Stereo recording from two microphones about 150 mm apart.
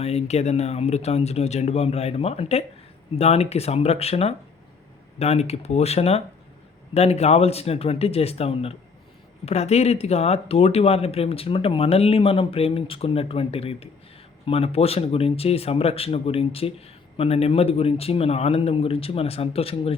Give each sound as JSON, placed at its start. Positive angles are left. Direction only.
{"t": 0.0, "sound": "speech", "side_deg": 45}